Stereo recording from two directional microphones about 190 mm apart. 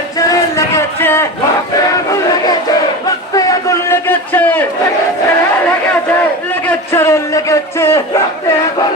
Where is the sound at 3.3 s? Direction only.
15° left (ahead or behind).